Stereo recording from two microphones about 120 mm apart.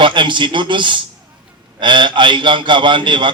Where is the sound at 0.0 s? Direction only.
40° right (ahead or behind).